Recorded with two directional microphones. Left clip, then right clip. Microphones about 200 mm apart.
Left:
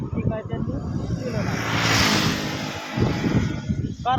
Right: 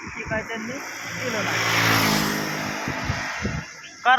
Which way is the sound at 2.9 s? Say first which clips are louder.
Left 3 dB; 50° left (ahead or behind).